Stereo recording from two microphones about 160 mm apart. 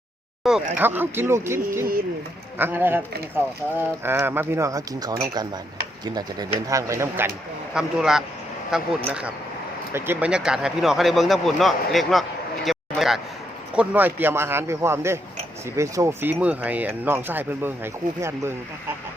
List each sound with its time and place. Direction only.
0.4 s speech: centre (ahead or behind)
0.8 s speech: 10° right (ahead or behind)
7.7 s speech: 5° right (ahead or behind)
12.6 s a sound: centre (ahead or behind)
13.7 s speech: 10° right (ahead or behind)